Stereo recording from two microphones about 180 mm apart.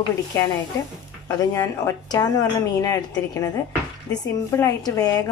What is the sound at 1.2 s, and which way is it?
A woman's voice, 15° left (ahead or behind).